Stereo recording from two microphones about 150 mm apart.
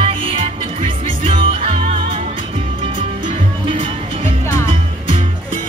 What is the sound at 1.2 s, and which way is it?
Music, 40° right (ahead or behind).